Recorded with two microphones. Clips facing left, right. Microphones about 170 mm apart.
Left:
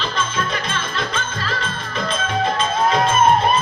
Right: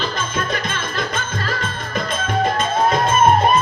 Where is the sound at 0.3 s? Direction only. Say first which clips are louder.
Right 1 dB; 45° right (ahead or behind).